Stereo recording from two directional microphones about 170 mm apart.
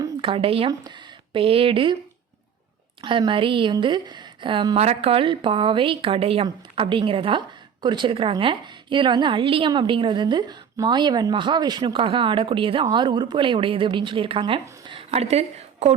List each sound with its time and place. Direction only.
0.0 s speech: 30° right (ahead or behind)
3.0 s a woman's voice: 30° right (ahead or behind)